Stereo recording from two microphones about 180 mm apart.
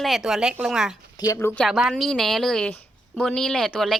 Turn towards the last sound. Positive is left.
turn(degrees=0)  # may be behind; listen again after turning